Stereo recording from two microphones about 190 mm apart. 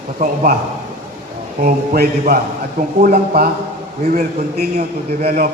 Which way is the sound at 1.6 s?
50° right (ahead or behind).